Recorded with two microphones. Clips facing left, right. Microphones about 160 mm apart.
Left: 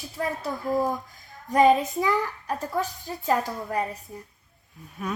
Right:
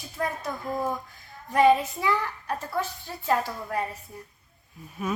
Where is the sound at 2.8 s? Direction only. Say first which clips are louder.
Left 2 dB; 40° left (ahead or behind).